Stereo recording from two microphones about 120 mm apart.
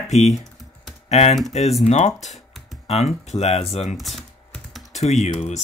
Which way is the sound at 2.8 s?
65° left (ahead or behind).